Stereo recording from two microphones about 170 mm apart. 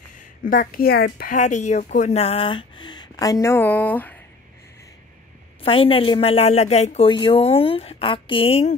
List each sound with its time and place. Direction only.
0.5 s a woman's voice: 55° left (ahead or behind); by 4.2 s 10° left (ahead or behind)
5.6 s a woman's voice: 35° left (ahead or behind)